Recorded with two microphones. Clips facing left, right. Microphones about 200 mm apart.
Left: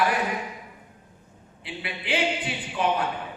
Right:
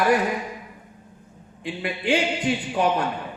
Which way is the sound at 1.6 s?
45° right (ahead or behind).